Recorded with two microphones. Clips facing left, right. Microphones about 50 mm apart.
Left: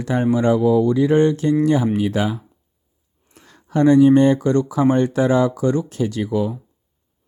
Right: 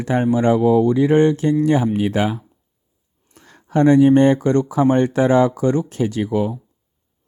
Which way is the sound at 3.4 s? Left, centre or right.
Right.